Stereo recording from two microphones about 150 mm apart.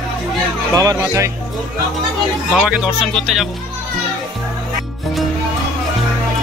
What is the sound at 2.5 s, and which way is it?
Speech, 5° right (ahead or behind).